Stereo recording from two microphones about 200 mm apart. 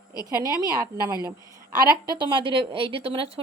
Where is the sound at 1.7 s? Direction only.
20° right (ahead or behind).